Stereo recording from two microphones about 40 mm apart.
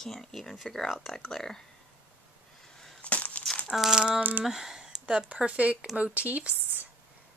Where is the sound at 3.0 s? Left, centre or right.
Left.